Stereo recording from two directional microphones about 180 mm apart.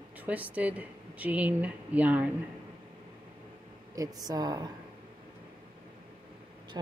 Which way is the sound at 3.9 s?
20° right (ahead or behind).